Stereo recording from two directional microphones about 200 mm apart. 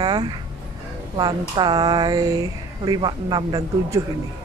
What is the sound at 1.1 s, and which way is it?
Speech, 20° right (ahead or behind).